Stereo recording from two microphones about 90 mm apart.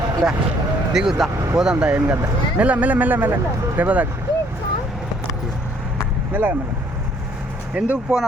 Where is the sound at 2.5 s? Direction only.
15° right (ahead or behind).